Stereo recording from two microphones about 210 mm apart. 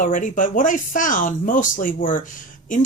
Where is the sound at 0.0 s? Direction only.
40° left (ahead or behind).